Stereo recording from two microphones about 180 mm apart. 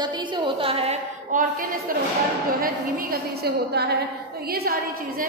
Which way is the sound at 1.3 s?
45° right (ahead or behind).